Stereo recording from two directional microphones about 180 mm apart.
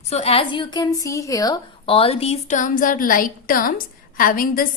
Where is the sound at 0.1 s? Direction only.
35° left (ahead or behind).